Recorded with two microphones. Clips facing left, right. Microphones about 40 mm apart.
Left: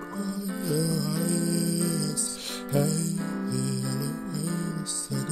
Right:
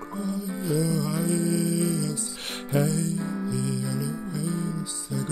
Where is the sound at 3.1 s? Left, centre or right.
Centre.